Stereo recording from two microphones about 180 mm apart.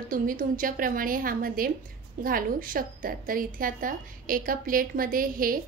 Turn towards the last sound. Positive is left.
turn(degrees=-50)  # may be behind; listen again after turning